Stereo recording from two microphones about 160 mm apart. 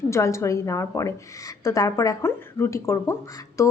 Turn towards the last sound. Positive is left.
turn(degrees=20)  # may be behind; listen again after turning